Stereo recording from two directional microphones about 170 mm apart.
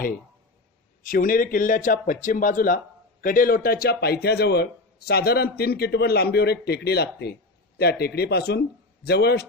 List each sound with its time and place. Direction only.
1.0 s speech: 55° left (ahead or behind); by 9.5 s 70° left (ahead or behind)